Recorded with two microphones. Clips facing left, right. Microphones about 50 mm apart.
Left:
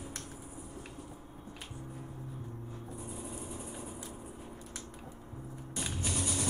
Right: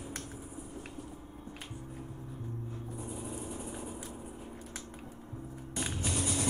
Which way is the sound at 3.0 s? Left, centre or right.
Centre.